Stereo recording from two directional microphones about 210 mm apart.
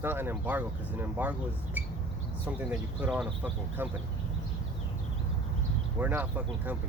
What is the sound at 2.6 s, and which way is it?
Speech, 5° right (ahead or behind).